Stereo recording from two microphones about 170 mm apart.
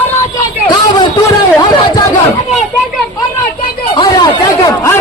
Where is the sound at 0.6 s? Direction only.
25° left (ahead or behind).